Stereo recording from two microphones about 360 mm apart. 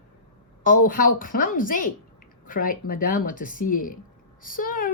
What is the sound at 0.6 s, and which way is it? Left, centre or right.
A woman's voice, left.